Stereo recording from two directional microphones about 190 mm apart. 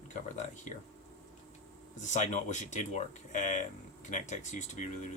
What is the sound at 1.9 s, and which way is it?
Speech, 40° left (ahead or behind).